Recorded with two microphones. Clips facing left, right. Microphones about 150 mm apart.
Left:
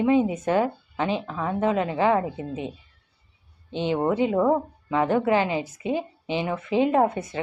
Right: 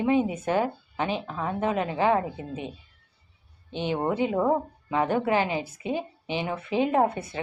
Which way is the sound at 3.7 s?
20° left (ahead or behind).